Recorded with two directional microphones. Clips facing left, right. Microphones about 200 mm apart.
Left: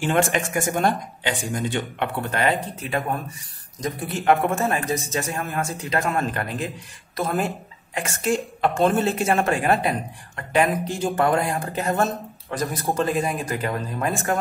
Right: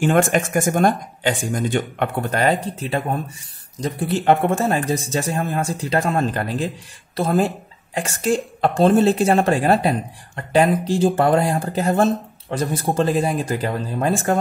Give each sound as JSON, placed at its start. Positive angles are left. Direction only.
{"t": 0.0, "sound": "speech", "side_deg": -50}
{"t": 4.1, "sound": "speech", "side_deg": -35}